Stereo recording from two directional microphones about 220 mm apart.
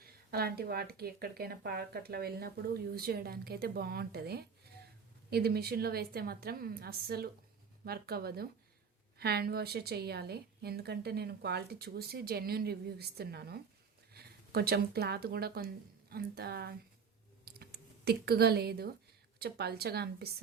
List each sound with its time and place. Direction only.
0.0 s speech: 45° right (ahead or behind)
17.4 s a sound: 45° right (ahead or behind)
19.4 s speech: 45° right (ahead or behind)